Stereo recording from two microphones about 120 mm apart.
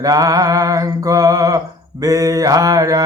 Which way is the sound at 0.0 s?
30° right (ahead or behind).